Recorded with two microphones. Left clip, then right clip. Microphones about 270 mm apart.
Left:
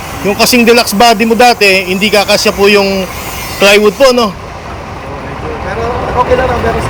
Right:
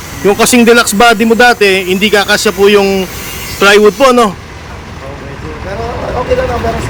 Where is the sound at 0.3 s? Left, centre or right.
Centre.